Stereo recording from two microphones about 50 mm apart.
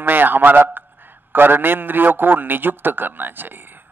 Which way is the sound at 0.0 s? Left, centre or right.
Right.